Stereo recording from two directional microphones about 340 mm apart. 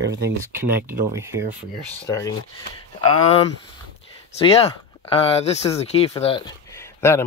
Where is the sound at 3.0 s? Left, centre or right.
Centre.